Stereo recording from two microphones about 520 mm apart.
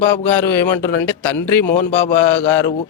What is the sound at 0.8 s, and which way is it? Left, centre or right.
Speech, centre.